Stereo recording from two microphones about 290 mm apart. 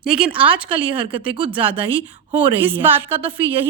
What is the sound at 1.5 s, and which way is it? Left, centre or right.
A woman's voice, centre.